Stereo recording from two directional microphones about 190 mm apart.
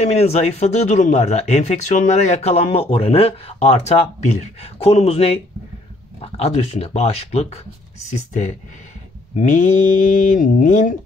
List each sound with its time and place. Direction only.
0.0 s speech: 35° left (ahead or behind)